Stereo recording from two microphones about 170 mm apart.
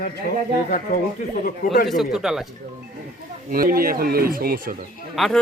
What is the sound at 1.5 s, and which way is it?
Speech, 60° left (ahead or behind).